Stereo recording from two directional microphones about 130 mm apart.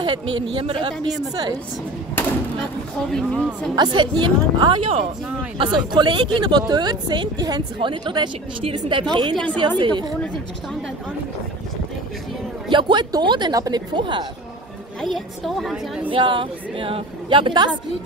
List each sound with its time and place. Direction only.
0.0 s speech: 40° right (ahead or behind)
3.1 s a woman's voice: 5° left (ahead or behind)
3.7 s speech: 35° right (ahead or behind)
12.6 s speech: 40° right (ahead or behind)
15.0 s a woman's voice: centre (ahead or behind)
16.1 s speech: 40° right (ahead or behind)